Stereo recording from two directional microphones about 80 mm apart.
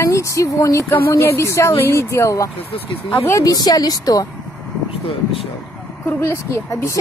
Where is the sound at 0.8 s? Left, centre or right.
Left.